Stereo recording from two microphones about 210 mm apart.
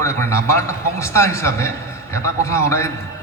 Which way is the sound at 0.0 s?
15° left (ahead or behind).